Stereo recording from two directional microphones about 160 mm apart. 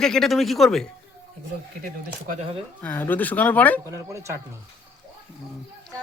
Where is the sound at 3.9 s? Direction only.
20° right (ahead or behind).